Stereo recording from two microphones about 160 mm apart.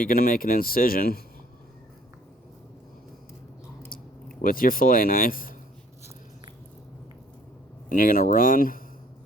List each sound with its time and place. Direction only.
0.0 s speech: 65° left (ahead or behind)
3.8 s speech: 65° left (ahead or behind)
7.9 s speech: 60° left (ahead or behind)